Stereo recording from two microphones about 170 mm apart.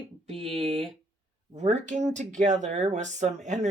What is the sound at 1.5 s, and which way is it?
Speech, 40° right (ahead or behind).